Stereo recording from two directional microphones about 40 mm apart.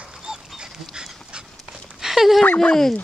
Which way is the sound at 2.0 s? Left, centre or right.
Centre.